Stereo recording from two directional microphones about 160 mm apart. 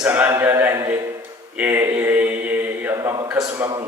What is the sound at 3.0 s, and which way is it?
Speech, 25° right (ahead or behind).